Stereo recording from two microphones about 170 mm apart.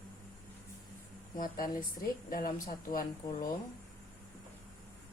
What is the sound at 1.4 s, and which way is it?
Speech, 55° left (ahead or behind).